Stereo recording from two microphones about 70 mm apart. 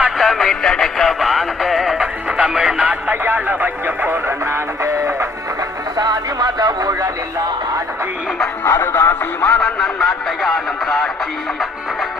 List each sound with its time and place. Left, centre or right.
0.2 s music: centre
2.8 s radio: right
6.0 s radio: right
8.7 s music: left
9.5 s radio: centre